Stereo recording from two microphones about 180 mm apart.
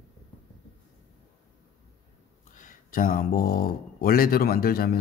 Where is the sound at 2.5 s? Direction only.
50° left (ahead or behind).